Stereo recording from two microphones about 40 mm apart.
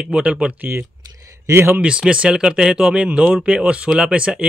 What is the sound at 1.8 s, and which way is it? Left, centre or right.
Speech, right.